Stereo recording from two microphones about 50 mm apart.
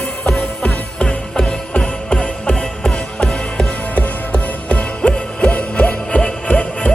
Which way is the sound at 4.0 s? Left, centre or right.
Left.